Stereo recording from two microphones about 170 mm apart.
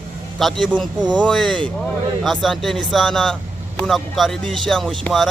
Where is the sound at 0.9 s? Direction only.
25° right (ahead or behind).